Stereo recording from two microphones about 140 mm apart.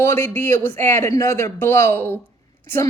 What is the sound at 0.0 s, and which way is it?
A woman's voice, 15° left (ahead or behind).